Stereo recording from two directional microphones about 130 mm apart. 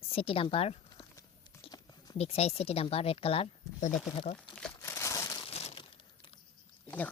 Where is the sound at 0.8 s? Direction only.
25° left (ahead or behind).